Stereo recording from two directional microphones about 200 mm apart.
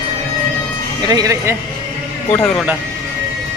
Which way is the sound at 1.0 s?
20° right (ahead or behind).